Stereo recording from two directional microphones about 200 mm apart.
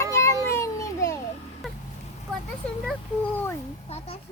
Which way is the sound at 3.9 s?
30° left (ahead or behind).